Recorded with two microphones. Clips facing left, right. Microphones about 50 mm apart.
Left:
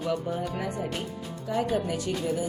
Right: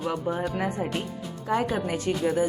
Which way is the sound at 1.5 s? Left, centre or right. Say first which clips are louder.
Right 1 dB; right.